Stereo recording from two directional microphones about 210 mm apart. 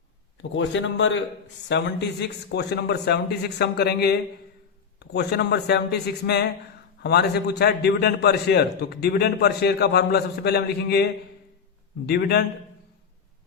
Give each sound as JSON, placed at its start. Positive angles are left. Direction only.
{"t": 0.5, "sound": "a man's voice", "side_deg": 60}